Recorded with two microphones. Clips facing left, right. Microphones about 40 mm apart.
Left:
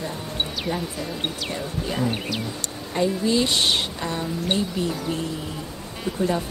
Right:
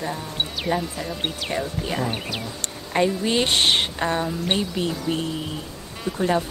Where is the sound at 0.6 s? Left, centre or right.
Centre.